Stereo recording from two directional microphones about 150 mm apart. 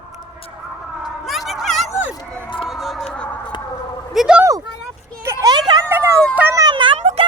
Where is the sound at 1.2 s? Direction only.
Centre (ahead or behind).